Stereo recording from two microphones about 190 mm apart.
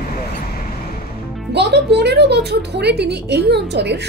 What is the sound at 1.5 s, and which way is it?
A woman's voice, 60° right (ahead or behind).